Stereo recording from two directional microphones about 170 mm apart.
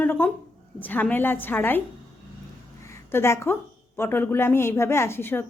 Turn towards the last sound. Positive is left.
turn(degrees=15)  # may be behind; listen again after turning